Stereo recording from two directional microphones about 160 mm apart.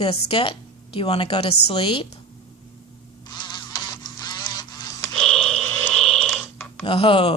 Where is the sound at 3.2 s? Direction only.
25° left (ahead or behind).